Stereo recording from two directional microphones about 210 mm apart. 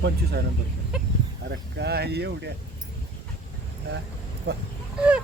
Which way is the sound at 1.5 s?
55° right (ahead or behind).